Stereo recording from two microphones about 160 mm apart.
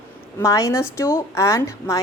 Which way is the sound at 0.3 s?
20° left (ahead or behind).